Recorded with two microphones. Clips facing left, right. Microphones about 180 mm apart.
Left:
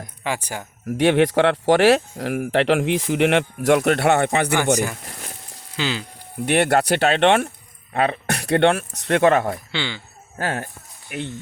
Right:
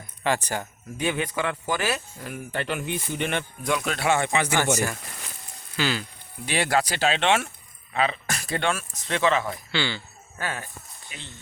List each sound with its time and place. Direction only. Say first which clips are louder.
0.2 s speech: right 2 dB; 10° left (ahead or behind)
0.9 s speech: left 12 dB; 80° left; by 4.5 s 60° left (ahead or behind)
5.7 s speech: left 1 dB; 20° left (ahead or behind)
6.4 s speech: left 6 dB; 60° left (ahead or behind)
9.7 s speech: even; 20° left (ahead or behind)
10.3 s speech: left 7 dB; 55° left (ahead or behind)
11.1 s speech: left 15 dB; 65° left (ahead or behind)